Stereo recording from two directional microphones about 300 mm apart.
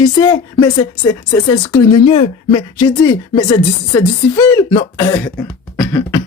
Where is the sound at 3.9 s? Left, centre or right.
Centre.